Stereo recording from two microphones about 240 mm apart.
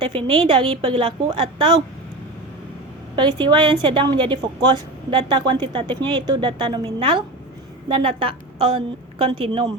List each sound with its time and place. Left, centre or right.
0.0 s a woman's voice: right
3.2 s a woman's voice: centre